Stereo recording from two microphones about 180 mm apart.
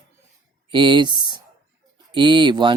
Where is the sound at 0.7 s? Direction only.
25° right (ahead or behind).